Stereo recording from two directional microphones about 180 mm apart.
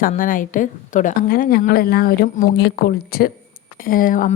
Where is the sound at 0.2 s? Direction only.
50° left (ahead or behind).